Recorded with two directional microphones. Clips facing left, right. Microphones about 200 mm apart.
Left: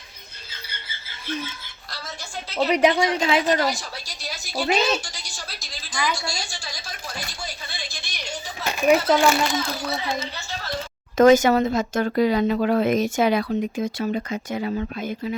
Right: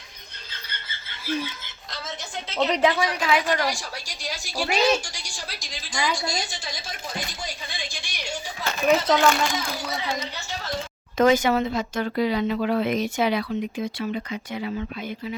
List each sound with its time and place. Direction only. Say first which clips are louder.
1.2 s speech: right 2 dB; 10° right (ahead or behind)
2.6 s a woman's voice: left 2 dB; 10° left (ahead or behind)
2.8 s a woman's voice: left 3 dB; 20° left (ahead or behind)
3.7 s a sound: left 2 dB; 10° right (ahead or behind)
8.6 s speech: left 2 dB; 15° left (ahead or behind)
11.2 s speech: left 4 dB; 45° left (ahead or behind)